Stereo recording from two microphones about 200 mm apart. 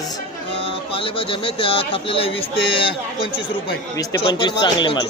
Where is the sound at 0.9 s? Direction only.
25° left (ahead or behind).